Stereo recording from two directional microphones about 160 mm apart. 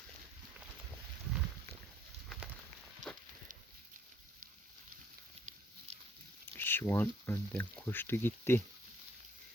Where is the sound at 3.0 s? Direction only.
50° right (ahead or behind).